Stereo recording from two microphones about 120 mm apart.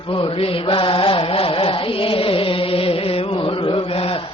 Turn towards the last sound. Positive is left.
turn(degrees=45)  # may be behind; listen again after turning